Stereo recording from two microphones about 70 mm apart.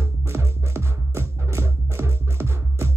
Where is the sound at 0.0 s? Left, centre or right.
Right.